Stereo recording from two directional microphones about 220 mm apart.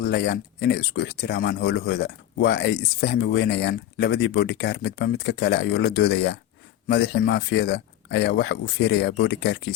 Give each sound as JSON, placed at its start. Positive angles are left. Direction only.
{"t": 0.0, "sound": "speech", "side_deg": 50}